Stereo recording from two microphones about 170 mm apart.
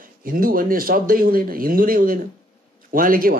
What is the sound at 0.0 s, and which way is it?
Speech, 55° right (ahead or behind).